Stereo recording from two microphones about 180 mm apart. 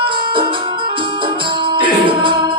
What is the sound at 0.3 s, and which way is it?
Music, 25° right (ahead or behind).